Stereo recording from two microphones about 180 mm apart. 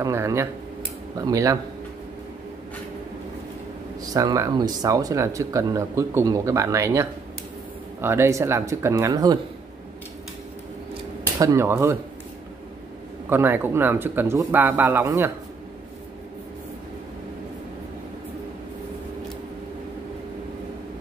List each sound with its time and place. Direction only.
0.0 s speech: 15° right (ahead or behind)
4.0 s speech: 20° right (ahead or behind)
11.3 s speech: 15° right (ahead or behind)
13.3 s speech: 10° right (ahead or behind)